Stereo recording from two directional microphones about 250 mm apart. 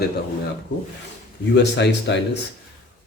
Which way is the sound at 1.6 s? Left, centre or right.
Left.